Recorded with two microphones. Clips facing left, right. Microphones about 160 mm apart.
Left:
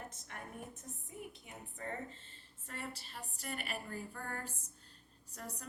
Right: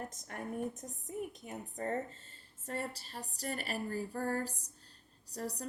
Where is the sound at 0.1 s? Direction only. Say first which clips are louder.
Right 8 dB; 40° right (ahead or behind).